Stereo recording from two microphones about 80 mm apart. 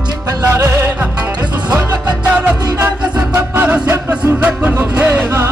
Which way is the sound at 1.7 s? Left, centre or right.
Centre.